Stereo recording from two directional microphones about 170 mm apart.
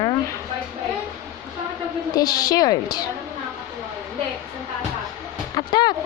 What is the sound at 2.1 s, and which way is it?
Speech, 20° left (ahead or behind).